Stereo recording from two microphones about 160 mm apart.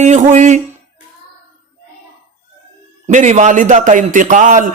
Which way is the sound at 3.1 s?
45° right (ahead or behind).